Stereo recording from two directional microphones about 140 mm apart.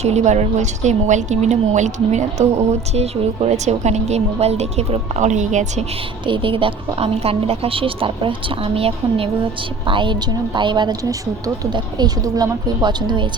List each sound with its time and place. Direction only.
0.0 s a woman's voice: 55° right (ahead or behind)
6.2 s a woman's voice: 35° right (ahead or behind)